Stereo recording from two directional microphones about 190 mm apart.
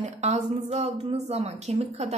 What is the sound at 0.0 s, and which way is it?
Speech, 35° right (ahead or behind).